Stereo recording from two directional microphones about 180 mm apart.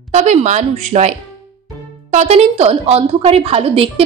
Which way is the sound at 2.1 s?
35° right (ahead or behind).